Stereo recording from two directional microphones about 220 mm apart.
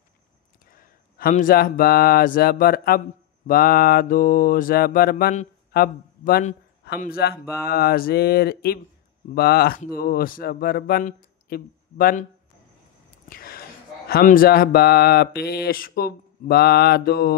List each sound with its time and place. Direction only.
0.7 s speech: 40° left (ahead or behind)
3.4 s mantra: 40° left (ahead or behind)
5.7 s a man's voice: 45° left (ahead or behind)
13.3 s a man's voice: 45° left (ahead or behind)